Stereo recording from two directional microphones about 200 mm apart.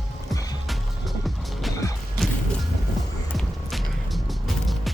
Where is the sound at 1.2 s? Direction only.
Centre (ahead or behind).